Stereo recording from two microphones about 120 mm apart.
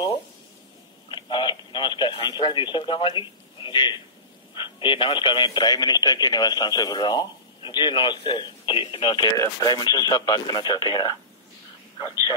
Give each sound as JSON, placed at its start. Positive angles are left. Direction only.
{"t": 1.1, "sound": "speech", "side_deg": 40}